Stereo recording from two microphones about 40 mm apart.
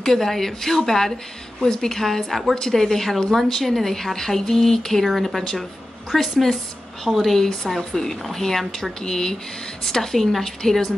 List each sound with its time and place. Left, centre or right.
0.0 s speech: centre
2.5 s speech: centre
5.0 s speech: centre
5.3 s speech: centre